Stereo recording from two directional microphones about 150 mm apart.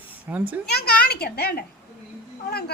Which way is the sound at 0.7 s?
90° left.